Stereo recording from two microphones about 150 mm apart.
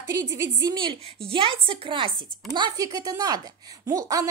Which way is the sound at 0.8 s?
35° right (ahead or behind).